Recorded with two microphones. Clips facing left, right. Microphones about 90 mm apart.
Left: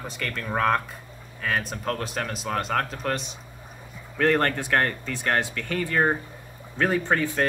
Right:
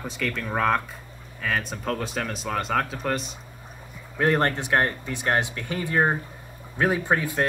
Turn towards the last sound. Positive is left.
turn(degrees=-5)  # may be behind; listen again after turning